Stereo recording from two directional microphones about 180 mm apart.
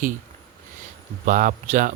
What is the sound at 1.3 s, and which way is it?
Speech, 45° right (ahead or behind).